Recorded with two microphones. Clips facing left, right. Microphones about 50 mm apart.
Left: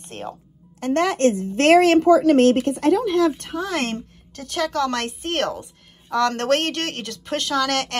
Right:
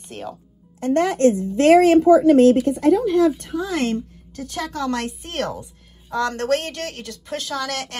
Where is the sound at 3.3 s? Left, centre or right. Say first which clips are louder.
Right 1 dB; left.